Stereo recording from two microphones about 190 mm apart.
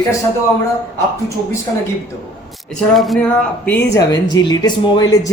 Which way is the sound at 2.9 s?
Centre (ahead or behind).